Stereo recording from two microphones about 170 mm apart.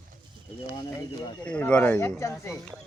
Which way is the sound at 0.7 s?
20° left (ahead or behind).